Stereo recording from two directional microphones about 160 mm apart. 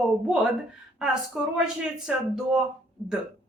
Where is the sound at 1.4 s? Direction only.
10° right (ahead or behind).